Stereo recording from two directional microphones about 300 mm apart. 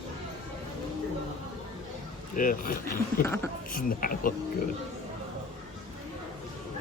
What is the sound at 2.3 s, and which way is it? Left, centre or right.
Speech, left.